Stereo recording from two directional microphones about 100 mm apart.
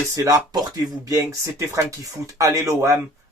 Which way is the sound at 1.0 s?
30° right (ahead or behind).